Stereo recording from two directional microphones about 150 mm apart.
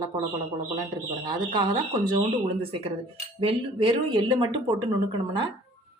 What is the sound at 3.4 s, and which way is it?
Speech, 35° right (ahead or behind).